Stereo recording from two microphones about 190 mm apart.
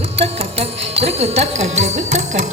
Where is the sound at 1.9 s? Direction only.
35° right (ahead or behind).